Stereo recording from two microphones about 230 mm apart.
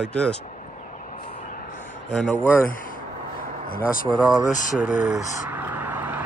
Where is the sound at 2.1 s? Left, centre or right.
Centre.